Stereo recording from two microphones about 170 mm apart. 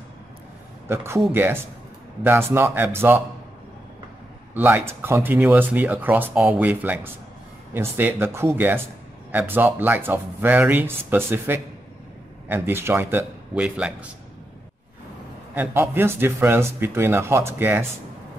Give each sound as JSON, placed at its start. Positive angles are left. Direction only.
{"t": 0.8, "sound": "speech", "side_deg": -15}
{"t": 4.6, "sound": "speech", "side_deg": -10}
{"t": 15.5, "sound": "speech", "side_deg": -10}